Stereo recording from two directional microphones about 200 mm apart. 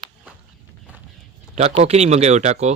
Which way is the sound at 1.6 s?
35° right (ahead or behind).